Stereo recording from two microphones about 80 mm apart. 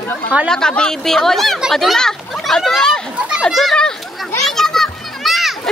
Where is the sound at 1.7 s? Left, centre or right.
Centre.